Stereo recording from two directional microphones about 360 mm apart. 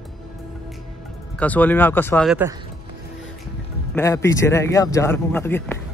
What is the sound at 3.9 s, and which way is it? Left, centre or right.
A man's voice, centre.